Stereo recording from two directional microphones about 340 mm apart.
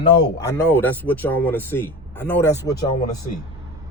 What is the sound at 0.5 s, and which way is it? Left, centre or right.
Speech, centre.